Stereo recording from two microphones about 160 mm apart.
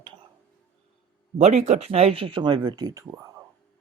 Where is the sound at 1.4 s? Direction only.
45° right (ahead or behind); by 3.4 s 20° right (ahead or behind).